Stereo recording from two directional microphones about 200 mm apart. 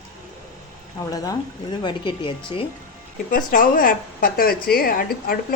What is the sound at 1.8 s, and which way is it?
Speech, 25° left (ahead or behind).